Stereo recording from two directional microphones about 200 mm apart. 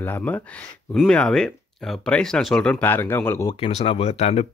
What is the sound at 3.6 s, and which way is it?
Speech, 30° left (ahead or behind).